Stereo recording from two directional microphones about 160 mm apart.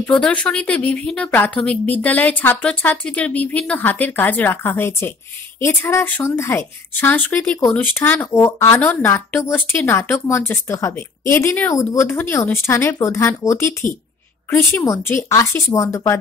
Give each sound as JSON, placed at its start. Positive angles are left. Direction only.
{"t": 0.0, "sound": "a woman's voice", "side_deg": 5}